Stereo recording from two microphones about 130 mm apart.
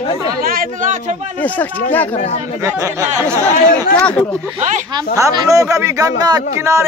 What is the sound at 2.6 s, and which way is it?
Speech, 25° right (ahead or behind).